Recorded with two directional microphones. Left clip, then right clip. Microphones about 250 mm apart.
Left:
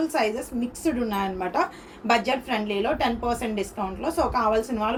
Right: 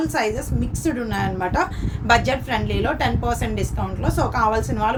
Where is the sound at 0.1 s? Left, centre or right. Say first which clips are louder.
Right 2 dB; centre.